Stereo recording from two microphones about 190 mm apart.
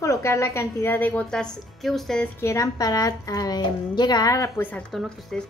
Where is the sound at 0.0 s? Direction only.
15° left (ahead or behind).